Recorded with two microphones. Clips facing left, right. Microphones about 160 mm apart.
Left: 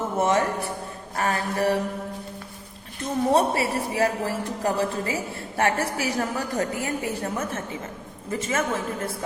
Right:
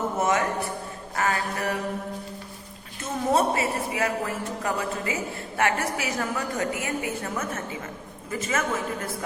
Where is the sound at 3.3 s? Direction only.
35° left (ahead or behind).